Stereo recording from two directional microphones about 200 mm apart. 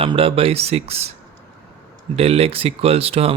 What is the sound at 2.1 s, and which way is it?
Speech, 30° right (ahead or behind).